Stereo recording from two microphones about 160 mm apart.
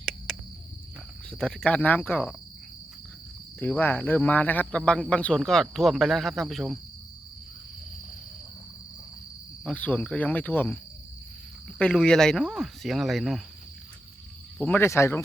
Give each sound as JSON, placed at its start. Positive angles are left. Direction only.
{"t": 0.3, "sound": "cricket", "side_deg": 5}
{"t": 1.3, "sound": "speech", "side_deg": 5}
{"t": 3.6, "sound": "speech", "side_deg": 10}
{"t": 9.6, "sound": "speech", "side_deg": 10}
{"t": 11.8, "sound": "speech", "side_deg": 5}
{"t": 14.6, "sound": "speech", "side_deg": 10}